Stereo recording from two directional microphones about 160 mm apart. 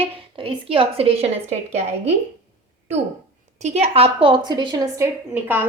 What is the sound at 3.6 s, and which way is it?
A woman's voice, 40° right (ahead or behind).